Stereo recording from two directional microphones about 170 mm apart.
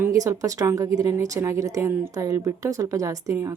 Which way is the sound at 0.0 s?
20° right (ahead or behind).